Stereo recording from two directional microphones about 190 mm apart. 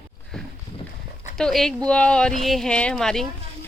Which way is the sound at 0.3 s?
5° left (ahead or behind).